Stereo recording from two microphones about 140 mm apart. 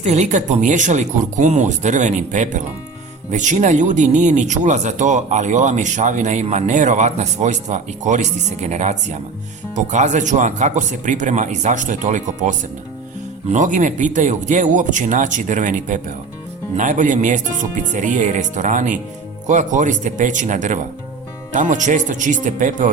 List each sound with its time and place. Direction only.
0.0 s speech: 55° right (ahead or behind)